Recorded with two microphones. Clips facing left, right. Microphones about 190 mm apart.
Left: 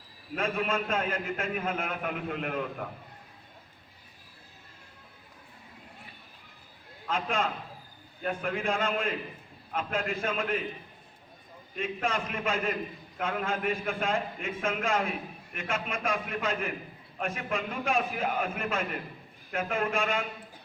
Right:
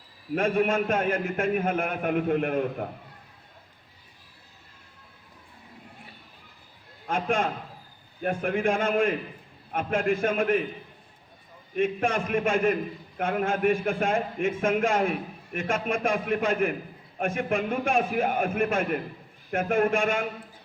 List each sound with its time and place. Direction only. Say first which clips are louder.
0.3 s a man's voice: right 6 dB; 50° right (ahead or behind)
7.1 s a man's voice: right 4 dB; 45° right (ahead or behind)
11.8 s a man's voice: right 6 dB; 50° right (ahead or behind)